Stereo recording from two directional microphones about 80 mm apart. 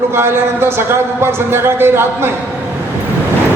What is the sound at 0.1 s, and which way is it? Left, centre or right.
A man's voice, right.